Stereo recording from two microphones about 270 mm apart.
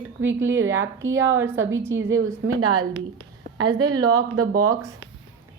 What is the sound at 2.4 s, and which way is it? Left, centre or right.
Speech, right.